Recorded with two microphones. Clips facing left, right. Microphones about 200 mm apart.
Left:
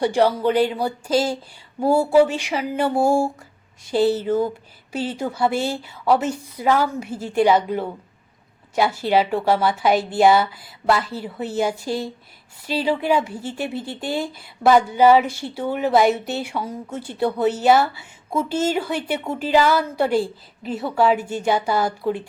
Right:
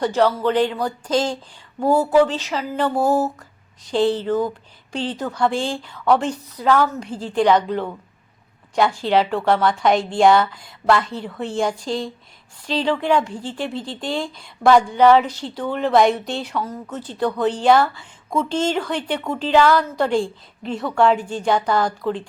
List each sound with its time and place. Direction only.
0.0 s speech: 10° left (ahead or behind)